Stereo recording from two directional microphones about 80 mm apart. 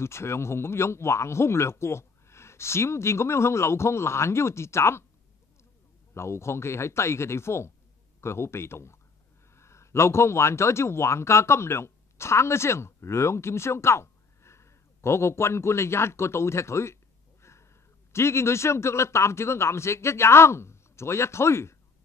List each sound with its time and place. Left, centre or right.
0.0 s speech: left
6.1 s speech: left